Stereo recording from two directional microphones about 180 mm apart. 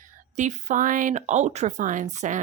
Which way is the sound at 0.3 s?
40° right (ahead or behind).